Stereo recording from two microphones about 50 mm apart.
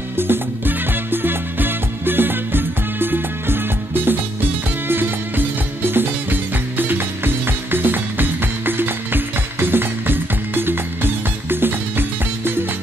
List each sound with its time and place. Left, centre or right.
0.2 s music: right